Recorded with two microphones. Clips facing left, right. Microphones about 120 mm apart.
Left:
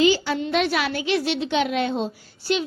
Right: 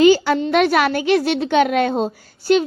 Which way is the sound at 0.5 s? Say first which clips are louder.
Right 7 dB; 50° right (ahead or behind).